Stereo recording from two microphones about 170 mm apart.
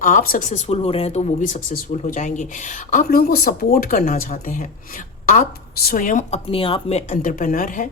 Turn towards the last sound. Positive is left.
turn(degrees=50)  # may be behind; listen again after turning